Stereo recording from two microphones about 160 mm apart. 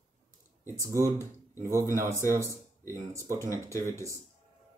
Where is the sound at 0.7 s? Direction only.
20° right (ahead or behind).